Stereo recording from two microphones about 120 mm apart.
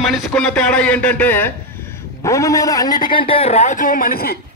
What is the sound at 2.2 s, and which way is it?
A man's voice, 25° left (ahead or behind).